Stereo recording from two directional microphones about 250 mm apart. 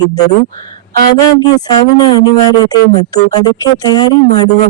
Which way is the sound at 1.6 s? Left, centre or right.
Centre.